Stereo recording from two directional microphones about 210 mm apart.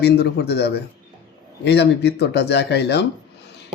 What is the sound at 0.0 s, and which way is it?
Speech, 50° left (ahead or behind).